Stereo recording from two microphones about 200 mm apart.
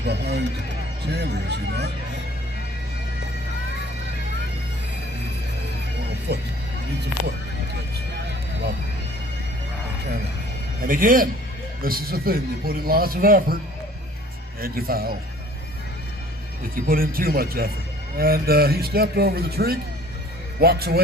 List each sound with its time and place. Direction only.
0.0 s speech: 55° right (ahead or behind)
6.3 s speech: 55° right (ahead or behind)
10.8 s a man's voice: 45° right (ahead or behind)
14.6 s a man's voice: 45° right (ahead or behind)
16.7 s a man's voice: 45° right (ahead or behind)